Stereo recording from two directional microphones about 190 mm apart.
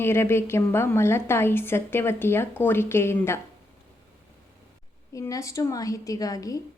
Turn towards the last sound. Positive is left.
turn(degrees=20)  # may be behind; listen again after turning